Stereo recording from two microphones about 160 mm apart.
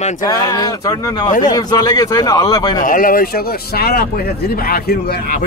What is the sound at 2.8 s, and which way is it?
Speech, 60° left (ahead or behind).